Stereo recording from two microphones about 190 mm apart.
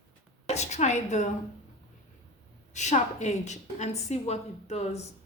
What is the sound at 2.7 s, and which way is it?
A woman's voice, 35° left (ahead or behind).